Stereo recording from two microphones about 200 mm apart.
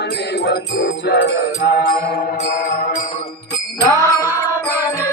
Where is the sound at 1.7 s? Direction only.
60° left (ahead or behind).